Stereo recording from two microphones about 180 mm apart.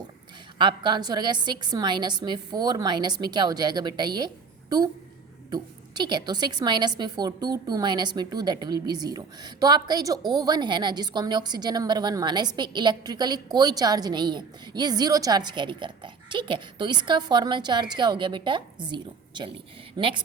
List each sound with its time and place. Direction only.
0.6 s a woman's voice: 25° right (ahead or behind)
5.5 s a woman's voice: 25° right (ahead or behind)